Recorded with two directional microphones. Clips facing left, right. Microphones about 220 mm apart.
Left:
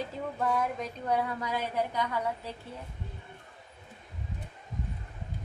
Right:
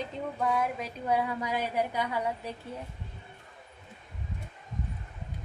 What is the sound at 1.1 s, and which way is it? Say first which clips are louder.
A woman's voice: right 1 dB; 15° right (ahead or behind).